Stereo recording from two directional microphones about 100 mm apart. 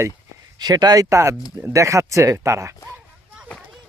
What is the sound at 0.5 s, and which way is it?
Speech, 40° right (ahead or behind).